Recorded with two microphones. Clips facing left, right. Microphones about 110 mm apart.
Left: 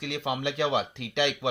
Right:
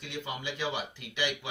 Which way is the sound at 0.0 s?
75° left (ahead or behind).